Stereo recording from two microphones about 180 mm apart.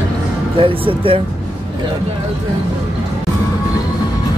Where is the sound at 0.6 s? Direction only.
30° right (ahead or behind).